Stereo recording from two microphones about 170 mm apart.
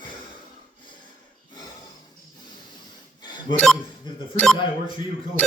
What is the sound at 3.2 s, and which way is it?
Chink, 25° left (ahead or behind).